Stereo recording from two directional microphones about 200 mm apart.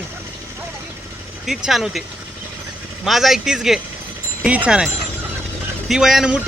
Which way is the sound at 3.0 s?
Centre (ahead or behind).